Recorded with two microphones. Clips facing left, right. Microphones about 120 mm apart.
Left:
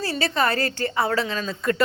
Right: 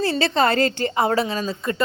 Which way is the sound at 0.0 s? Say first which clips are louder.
Right 4 dB; 25° right (ahead or behind).